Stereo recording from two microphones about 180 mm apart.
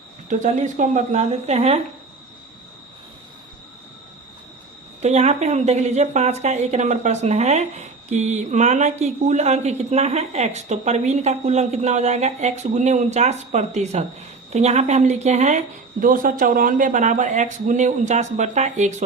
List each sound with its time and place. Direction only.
0.3 s a woman's voice: 40° right (ahead or behind)
5.0 s a woman's voice: 40° right (ahead or behind)